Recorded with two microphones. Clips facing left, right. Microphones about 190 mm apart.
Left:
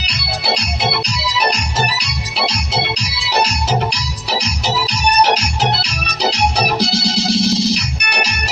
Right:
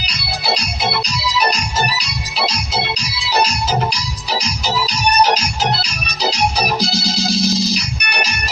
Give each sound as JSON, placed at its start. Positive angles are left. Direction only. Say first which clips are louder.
{"t": 0.0, "sound": "organ", "louder": "left 1 dB", "side_deg": 65}
{"t": 2.5, "sound": "music", "louder": "left 1 dB", "side_deg": 65}